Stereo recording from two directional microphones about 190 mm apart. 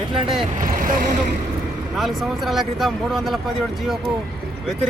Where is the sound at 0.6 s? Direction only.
45° right (ahead or behind).